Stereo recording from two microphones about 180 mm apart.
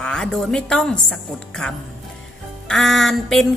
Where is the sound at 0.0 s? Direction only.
5° left (ahead or behind).